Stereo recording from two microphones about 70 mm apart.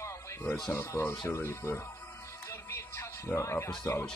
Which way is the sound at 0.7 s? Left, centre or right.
Left.